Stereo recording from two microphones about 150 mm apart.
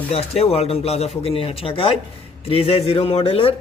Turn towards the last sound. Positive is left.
turn(degrees=40)  # may be behind; listen again after turning